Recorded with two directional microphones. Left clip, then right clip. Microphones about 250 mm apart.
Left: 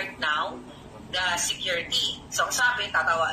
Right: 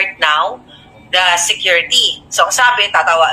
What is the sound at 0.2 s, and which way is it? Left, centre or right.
A woman's voice, right.